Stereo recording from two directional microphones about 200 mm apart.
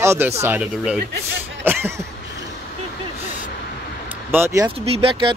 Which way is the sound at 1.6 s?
10° right (ahead or behind).